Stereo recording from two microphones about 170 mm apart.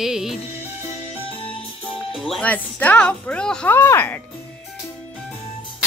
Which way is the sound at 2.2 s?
5° left (ahead or behind).